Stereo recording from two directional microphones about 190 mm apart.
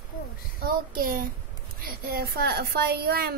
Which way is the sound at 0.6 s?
50° right (ahead or behind).